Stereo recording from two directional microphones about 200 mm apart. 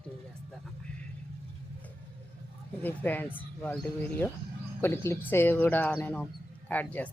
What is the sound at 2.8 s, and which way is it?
Speech, 10° left (ahead or behind).